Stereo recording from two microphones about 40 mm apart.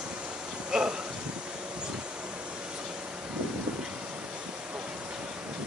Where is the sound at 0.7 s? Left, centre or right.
Centre.